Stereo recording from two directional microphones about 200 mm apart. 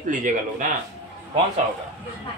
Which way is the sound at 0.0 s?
40° right (ahead or behind).